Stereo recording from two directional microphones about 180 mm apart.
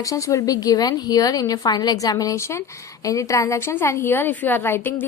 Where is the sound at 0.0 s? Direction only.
20° left (ahead or behind).